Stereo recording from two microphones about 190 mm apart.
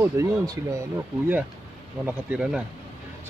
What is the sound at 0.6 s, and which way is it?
Speech, 15° right (ahead or behind).